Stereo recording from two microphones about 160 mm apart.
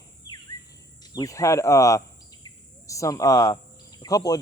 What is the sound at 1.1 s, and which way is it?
Speech, 20° left (ahead or behind).